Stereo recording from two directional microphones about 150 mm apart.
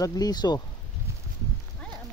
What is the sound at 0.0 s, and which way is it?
Speech, 25° left (ahead or behind).